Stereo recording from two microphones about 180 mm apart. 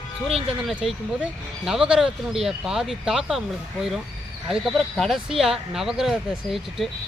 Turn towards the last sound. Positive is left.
turn(degrees=0)  # may be behind; listen again after turning